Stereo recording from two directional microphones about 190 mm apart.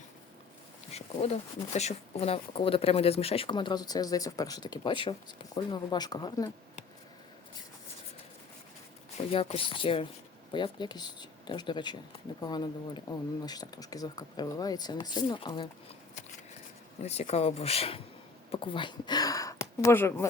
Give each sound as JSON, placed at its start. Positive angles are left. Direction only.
{"t": 0.9, "sound": "speech", "side_deg": 35}
{"t": 9.1, "sound": "speech", "side_deg": 35}
{"t": 17.0, "sound": "speech", "side_deg": 35}